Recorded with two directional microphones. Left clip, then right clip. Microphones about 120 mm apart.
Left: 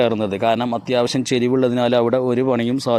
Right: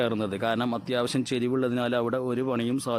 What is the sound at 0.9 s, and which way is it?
Speech, 30° left (ahead or behind).